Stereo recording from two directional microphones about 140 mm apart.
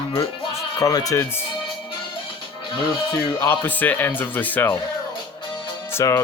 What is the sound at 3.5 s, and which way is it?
Speech, 15° left (ahead or behind).